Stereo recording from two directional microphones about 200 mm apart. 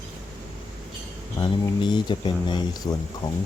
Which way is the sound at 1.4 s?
25° left (ahead or behind).